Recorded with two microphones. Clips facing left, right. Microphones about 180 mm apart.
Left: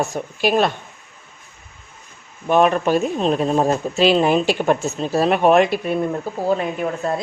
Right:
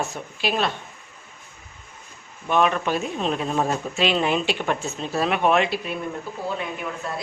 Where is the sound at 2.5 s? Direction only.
40° left (ahead or behind).